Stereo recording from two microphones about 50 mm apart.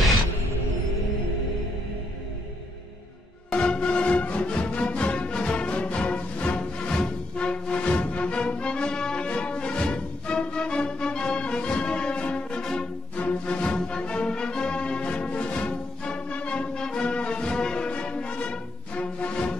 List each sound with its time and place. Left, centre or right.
3.4 s music: left